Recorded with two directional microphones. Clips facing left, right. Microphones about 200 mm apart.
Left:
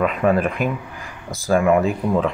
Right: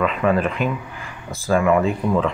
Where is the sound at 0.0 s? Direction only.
45° left (ahead or behind).